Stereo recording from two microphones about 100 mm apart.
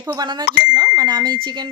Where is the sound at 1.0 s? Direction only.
45° right (ahead or behind).